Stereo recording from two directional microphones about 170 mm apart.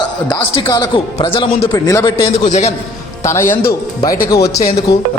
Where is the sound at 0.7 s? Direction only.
30° left (ahead or behind).